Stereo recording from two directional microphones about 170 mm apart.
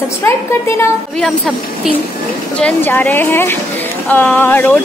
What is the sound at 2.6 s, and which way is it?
Speech, 10° left (ahead or behind).